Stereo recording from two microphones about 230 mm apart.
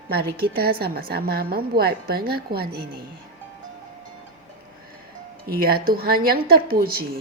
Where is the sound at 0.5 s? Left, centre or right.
Right.